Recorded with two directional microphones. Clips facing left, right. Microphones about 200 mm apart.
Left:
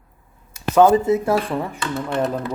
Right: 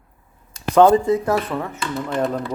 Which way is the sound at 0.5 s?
5° left (ahead or behind).